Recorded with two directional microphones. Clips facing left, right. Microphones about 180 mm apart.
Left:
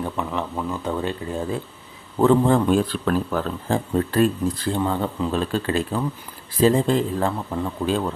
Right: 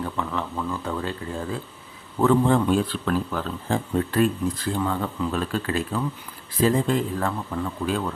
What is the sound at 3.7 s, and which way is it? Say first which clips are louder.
Speech: left 2 dB; 35° left (ahead or behind).